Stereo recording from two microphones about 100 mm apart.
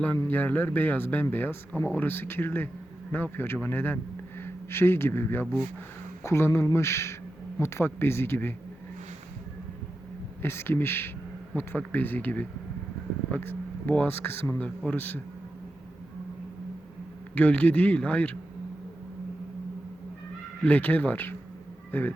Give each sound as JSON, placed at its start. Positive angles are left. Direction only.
{"t": 0.2, "sound": "a man's voice", "side_deg": 20}
{"t": 10.4, "sound": "speech", "side_deg": 25}
{"t": 17.3, "sound": "speech", "side_deg": 15}
{"t": 20.7, "sound": "speech", "side_deg": 15}